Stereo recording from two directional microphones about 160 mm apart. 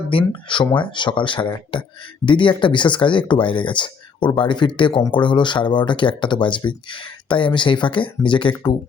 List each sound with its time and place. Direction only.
0.1 s speech: 30° left (ahead or behind)